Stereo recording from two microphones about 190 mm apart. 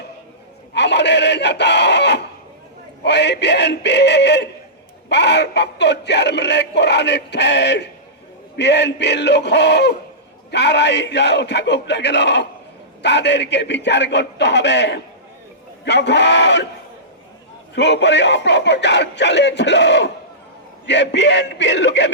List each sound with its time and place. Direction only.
0.7 s speech: 65° left (ahead or behind)
17.7 s speech: 65° left (ahead or behind)